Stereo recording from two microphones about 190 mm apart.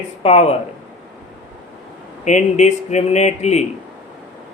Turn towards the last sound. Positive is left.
turn(degrees=35)  # may be behind; listen again after turning